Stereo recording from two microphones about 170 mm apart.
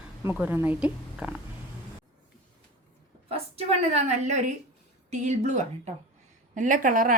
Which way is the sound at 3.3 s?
35° right (ahead or behind).